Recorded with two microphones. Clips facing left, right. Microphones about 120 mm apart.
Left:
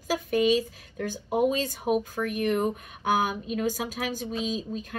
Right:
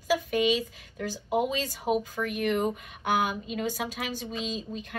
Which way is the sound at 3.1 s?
40° left (ahead or behind).